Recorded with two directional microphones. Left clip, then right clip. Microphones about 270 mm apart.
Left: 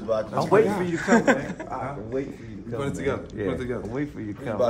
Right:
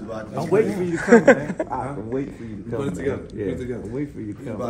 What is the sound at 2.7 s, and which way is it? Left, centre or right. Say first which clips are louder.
Speech: right 2 dB; centre.